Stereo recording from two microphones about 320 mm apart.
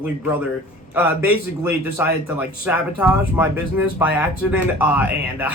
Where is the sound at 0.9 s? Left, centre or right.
Centre.